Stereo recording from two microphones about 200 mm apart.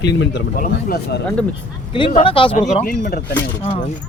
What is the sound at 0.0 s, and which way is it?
Speech, 60° left (ahead or behind).